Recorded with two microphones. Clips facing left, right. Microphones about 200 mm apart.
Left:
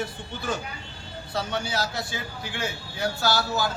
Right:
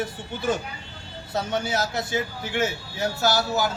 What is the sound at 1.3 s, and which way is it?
A man's voice, 20° right (ahead or behind).